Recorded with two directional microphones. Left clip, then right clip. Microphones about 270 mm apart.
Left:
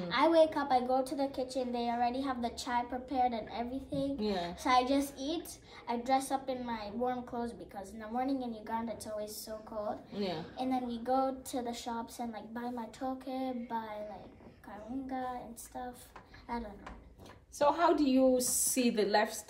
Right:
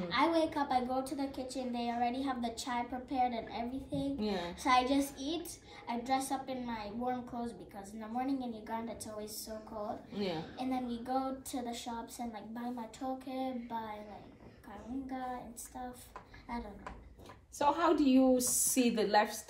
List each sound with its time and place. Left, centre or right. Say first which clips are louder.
0.1 s a woman's voice: left 5 dB; centre
4.2 s a woman's voice: left 2 dB; centre
4.5 s a woman's voice: even; centre
10.1 s a woman's voice: right 2 dB; centre
10.6 s a woman's voice: left 5 dB; centre
15.0 s a woman's voice: left 3 dB; centre
17.6 s a woman's voice: left 2 dB; centre